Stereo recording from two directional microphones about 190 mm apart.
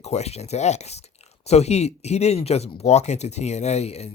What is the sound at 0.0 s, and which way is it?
Speech, 35° left (ahead or behind).